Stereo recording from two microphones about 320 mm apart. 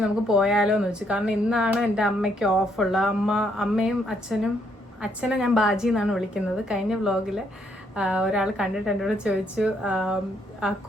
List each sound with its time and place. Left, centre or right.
0.3 s speech: centre